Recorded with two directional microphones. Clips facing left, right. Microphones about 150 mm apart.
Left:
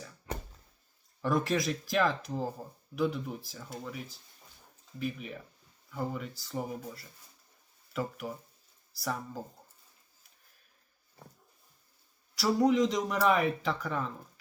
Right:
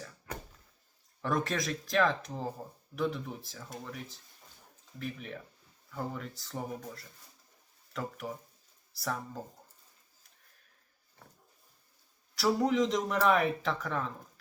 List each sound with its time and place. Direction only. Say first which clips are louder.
0.3 s a sound: left 3 dB; 25° left (ahead or behind)
1.2 s speech: left 3 dB; centre (ahead or behind)
12.3 s speech: left 2 dB; centre (ahead or behind)